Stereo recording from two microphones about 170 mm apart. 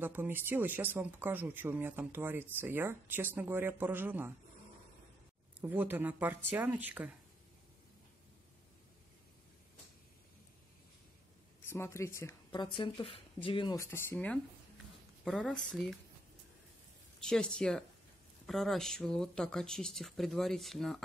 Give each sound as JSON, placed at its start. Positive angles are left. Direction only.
{"t": 0.0, "sound": "speech", "side_deg": -10}
{"t": 5.6, "sound": "speech", "side_deg": -10}
{"t": 11.7, "sound": "a woman's voice", "side_deg": 15}
{"t": 12.6, "sound": "speech", "side_deg": 30}
{"t": 13.7, "sound": "speech", "side_deg": 15}
{"t": 17.2, "sound": "speech", "side_deg": 5}